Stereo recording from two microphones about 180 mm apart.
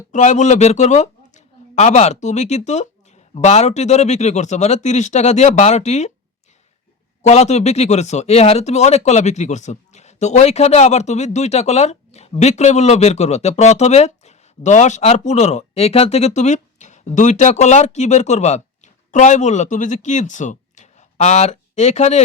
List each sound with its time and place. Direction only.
0.1 s a man's voice: 40° left (ahead or behind)
7.2 s speech: 40° left (ahead or behind)